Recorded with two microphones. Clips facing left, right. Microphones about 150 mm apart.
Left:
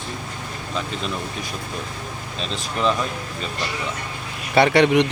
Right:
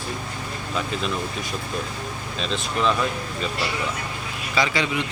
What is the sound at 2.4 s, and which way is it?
Speech, centre (ahead or behind).